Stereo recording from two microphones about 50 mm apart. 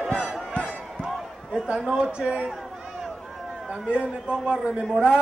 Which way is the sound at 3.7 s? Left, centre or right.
Centre.